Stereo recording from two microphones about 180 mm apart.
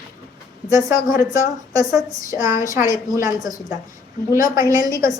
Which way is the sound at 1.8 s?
20° right (ahead or behind).